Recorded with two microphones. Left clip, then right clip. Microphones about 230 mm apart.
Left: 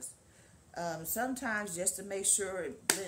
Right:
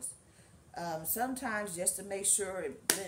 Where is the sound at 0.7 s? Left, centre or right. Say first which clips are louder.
Even; centre.